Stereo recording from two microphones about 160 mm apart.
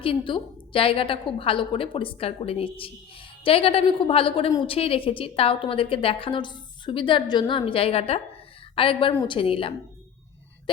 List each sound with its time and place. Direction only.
0.0 s a woman's voice: 35° left (ahead or behind)